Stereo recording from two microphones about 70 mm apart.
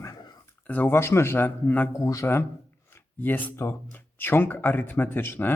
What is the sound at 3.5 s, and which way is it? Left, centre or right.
Speech, left.